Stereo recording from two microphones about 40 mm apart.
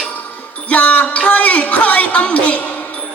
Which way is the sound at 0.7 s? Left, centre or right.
Left.